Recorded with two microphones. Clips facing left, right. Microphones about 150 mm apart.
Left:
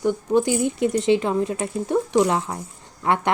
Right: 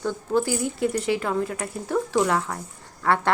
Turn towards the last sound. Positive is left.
turn(degrees=20)  # may be behind; listen again after turning